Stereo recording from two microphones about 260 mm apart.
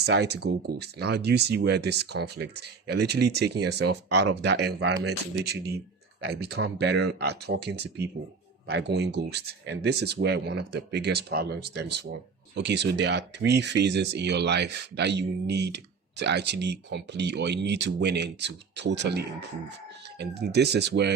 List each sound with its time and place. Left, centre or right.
0.0 s speech: right